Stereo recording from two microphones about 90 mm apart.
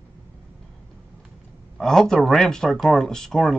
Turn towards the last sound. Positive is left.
turn(degrees=5)  # may be behind; listen again after turning